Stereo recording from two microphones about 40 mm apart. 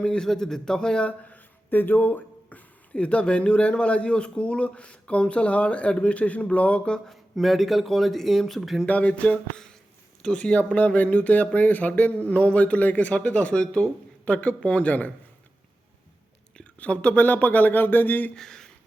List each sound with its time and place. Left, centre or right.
0.0 s speech: left
0.3 s speech: centre
1.0 s a man's voice: left
1.7 s a sound: left
2.9 s speech: left
7.1 s speech: centre
8.9 s a man's voice: left
10.2 s speech: left
10.8 s a man's voice: left
16.7 s speech: left
17.2 s speech: left
18.3 s a sound: centre